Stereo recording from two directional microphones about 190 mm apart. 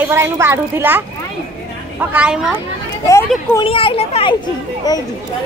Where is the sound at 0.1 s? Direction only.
15° right (ahead or behind).